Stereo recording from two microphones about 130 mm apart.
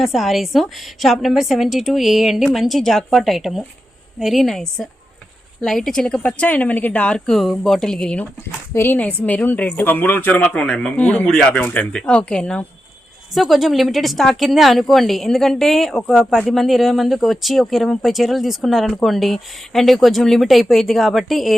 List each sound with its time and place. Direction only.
0.0 s a woman's voice: centre (ahead or behind)